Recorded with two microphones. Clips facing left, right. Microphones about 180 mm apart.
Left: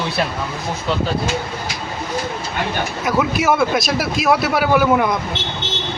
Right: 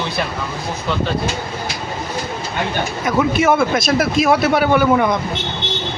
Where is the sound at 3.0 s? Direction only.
Centre (ahead or behind).